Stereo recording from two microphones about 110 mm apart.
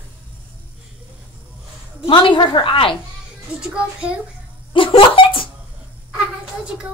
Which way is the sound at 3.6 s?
10° right (ahead or behind).